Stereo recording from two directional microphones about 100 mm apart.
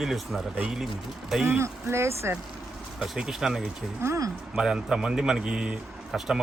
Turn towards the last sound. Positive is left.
turn(degrees=-5)  # may be behind; listen again after turning